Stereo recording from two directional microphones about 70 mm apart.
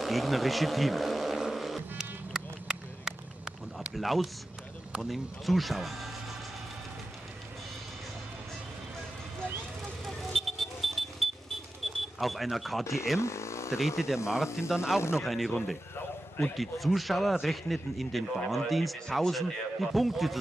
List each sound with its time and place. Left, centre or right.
0.0 s vehicle: centre
3.9 s speech: centre
10.0 s vehicle: centre
12.2 s speech: centre
13.2 s a sound: left
13.7 s speech: centre
15.0 s speech: left
15.2 s speech: centre